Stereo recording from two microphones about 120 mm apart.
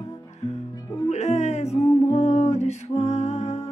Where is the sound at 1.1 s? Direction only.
70° left (ahead or behind).